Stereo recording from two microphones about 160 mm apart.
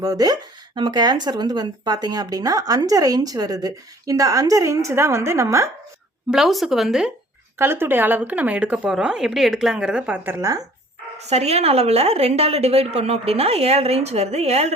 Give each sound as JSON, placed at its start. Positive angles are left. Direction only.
{"t": 0.0, "sound": "speech", "side_deg": -25}
{"t": 6.3, "sound": "speech", "side_deg": 0}
{"t": 7.6, "sound": "speech", "side_deg": -15}
{"t": 11.2, "sound": "a woman's voice", "side_deg": -40}